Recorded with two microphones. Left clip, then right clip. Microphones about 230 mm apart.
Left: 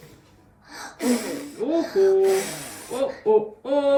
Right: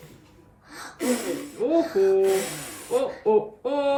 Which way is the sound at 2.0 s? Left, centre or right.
Centre.